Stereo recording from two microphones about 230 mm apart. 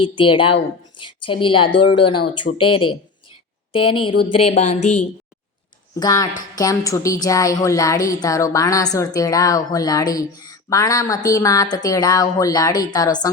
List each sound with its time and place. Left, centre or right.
0.0 s a woman's voice: left
2.5 s speech: left
3.7 s a woman's voice: left
6.0 s a woman's voice: centre